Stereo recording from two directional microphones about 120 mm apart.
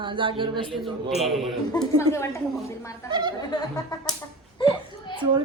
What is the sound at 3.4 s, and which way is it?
Music, 35° left (ahead or behind).